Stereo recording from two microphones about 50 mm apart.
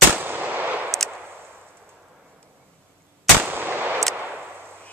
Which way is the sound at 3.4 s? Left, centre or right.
Right.